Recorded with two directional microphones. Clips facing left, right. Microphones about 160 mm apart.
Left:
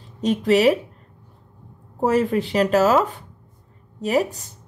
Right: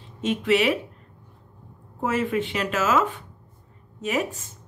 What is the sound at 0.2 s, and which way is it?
Speech, 40° left (ahead or behind).